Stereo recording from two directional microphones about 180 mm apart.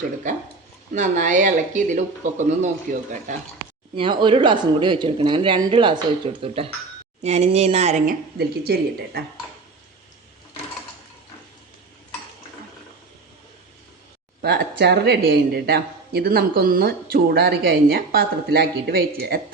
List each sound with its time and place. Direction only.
0.9 s speech: 45° right (ahead or behind)
3.9 s a man's voice: 25° right (ahead or behind)
8.4 s speech: 60° right (ahead or behind)
14.4 s speech: 70° right (ahead or behind)